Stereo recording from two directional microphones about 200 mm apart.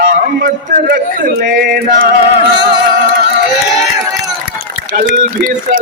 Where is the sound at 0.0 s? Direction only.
50° right (ahead or behind).